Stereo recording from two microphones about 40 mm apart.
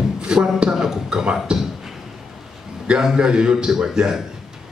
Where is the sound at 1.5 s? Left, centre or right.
Right.